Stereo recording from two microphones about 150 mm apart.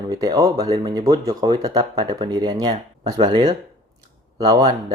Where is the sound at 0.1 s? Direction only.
25° right (ahead or behind).